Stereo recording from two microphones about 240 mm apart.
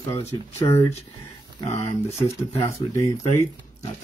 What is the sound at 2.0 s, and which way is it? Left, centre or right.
Speech, left.